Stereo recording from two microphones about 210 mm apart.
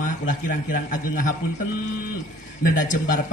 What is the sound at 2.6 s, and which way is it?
Speech, 40° left (ahead or behind).